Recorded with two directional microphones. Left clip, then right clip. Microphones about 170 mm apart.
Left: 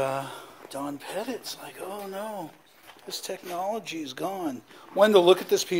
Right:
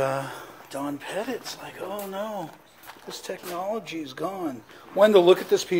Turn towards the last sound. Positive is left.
turn(degrees=40)  # may be behind; listen again after turning